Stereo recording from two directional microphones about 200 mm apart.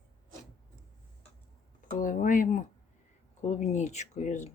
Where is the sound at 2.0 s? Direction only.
40° left (ahead or behind).